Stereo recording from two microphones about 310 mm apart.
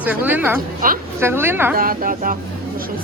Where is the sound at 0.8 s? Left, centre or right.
Right.